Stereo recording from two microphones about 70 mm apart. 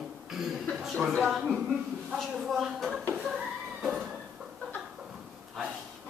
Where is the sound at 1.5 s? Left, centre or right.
Centre.